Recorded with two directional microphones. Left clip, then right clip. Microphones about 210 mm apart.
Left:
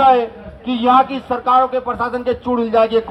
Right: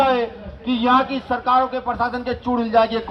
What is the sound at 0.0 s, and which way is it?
A man's voice, 40° left (ahead or behind).